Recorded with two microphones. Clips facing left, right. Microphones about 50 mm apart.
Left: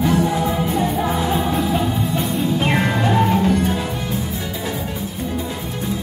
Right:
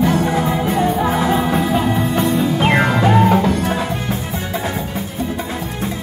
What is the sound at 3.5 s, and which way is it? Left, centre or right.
Music, right.